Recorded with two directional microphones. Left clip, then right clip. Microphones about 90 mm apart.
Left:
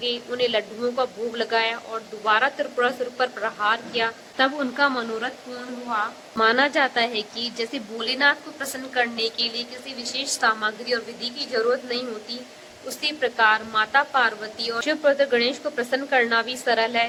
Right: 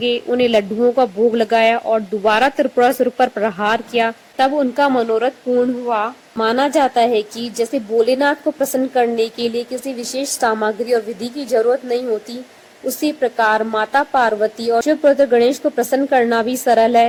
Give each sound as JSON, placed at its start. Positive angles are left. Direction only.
{"t": 0.0, "sound": "speech", "side_deg": -30}
{"t": 6.4, "sound": "a woman's voice", "side_deg": -30}